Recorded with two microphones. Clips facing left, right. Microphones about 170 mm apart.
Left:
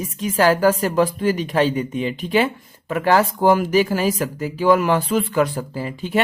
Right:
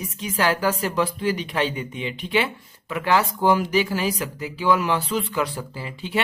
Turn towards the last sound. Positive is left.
turn(degrees=45)  # may be behind; listen again after turning